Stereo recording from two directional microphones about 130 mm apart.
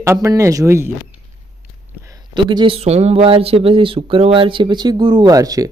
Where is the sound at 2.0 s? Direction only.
25° right (ahead or behind).